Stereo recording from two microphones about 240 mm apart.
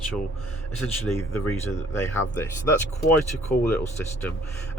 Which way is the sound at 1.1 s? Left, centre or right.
Centre.